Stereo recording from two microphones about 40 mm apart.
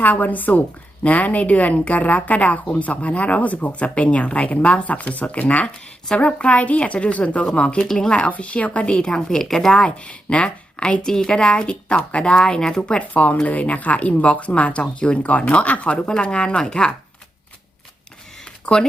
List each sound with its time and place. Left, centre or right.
0.0 s a woman's voice: left; by 9.8 s centre
9.8 s speech: left
11.0 s speech: centre
12.8 s speech: left
18.4 s a sound: left